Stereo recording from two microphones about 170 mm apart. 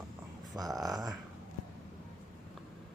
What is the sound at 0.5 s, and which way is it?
Speech, 5° right (ahead or behind).